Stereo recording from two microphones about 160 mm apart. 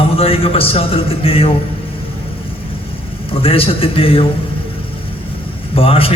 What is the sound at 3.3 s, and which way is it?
Speech, 35° left (ahead or behind).